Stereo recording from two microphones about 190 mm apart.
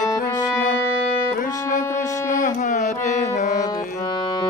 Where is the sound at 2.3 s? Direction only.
40° left (ahead or behind).